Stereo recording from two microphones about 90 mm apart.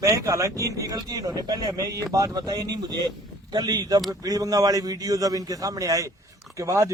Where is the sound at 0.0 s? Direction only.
35° right (ahead or behind).